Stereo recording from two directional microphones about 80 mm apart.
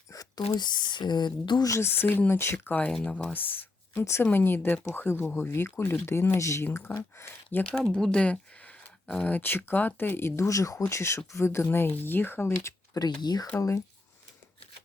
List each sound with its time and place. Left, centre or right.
0.1 s speech: left
1.6 s speech: left
1.9 s speech: left
2.9 s speech: centre
3.3 s a sound: left
4.0 s speech: left
7.6 s speech: centre
12.9 s speech: left
13.6 s speech: left